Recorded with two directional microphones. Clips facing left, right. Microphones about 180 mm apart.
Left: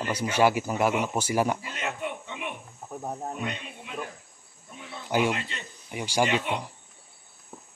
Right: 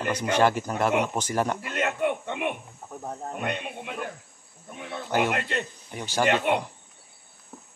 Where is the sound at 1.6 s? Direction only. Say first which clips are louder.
Right 7 dB; 60° right (ahead or behind).